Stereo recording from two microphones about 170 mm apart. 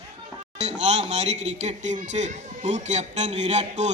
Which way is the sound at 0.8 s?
45° right (ahead or behind).